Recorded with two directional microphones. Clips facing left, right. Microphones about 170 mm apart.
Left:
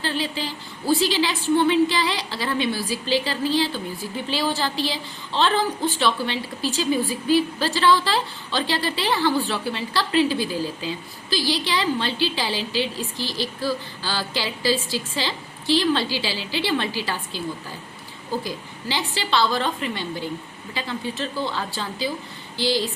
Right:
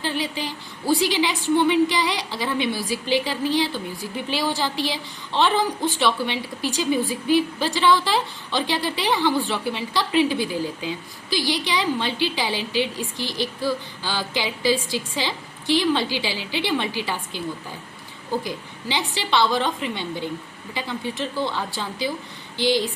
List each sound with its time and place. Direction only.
0.0 s a woman's voice: 15° right (ahead or behind)
18.4 s a woman's voice: 20° right (ahead or behind)